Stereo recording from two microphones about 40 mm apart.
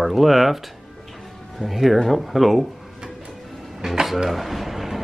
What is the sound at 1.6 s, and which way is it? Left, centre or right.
Speech, centre.